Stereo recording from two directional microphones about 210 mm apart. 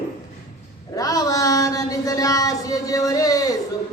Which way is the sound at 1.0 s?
15° left (ahead or behind).